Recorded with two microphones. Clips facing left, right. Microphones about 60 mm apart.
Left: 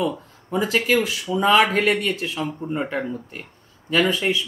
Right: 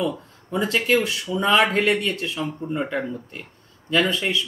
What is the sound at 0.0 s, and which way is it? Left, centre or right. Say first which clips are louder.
Speech: left 1 dB; centre.